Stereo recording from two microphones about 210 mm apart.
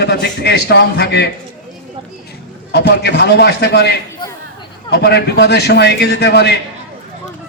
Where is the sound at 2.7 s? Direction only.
50° left (ahead or behind).